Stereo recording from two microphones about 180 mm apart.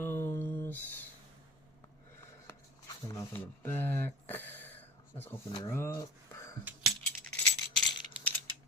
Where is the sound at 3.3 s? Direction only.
10° left (ahead or behind).